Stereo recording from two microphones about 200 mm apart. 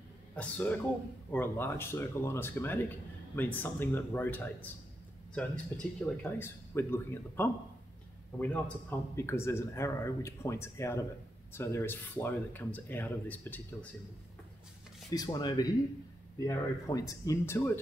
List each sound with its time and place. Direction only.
0.4 s speech: 10° left (ahead or behind)
15.0 s speech: 20° left (ahead or behind)